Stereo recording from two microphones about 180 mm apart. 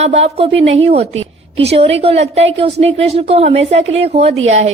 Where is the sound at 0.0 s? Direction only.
35° right (ahead or behind).